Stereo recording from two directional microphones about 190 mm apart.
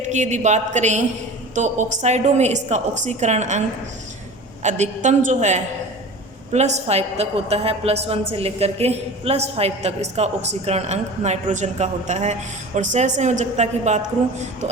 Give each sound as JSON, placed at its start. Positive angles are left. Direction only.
{"t": 0.0, "sound": "a woman's voice", "side_deg": -40}
{"t": 4.6, "sound": "a woman's voice", "side_deg": -40}